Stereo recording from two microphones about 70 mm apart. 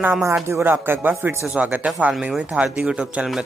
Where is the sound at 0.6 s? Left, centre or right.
Right.